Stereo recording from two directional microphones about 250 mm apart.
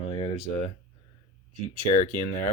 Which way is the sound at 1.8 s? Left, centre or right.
Left.